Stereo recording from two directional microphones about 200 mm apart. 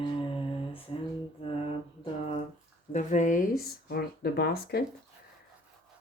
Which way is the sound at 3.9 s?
50° left (ahead or behind).